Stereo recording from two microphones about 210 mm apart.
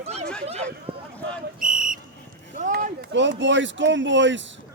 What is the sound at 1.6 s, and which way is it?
Whistle, 40° right (ahead or behind).